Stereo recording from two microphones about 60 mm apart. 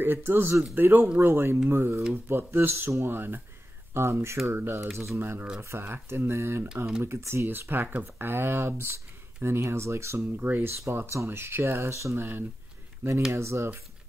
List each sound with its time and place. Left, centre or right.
0.0 s speech: right
1.2 s speech: right
7.6 s speech: right
10.3 s speech: right
10.8 s speech: right
12.2 s speech: right
13.3 s speech: right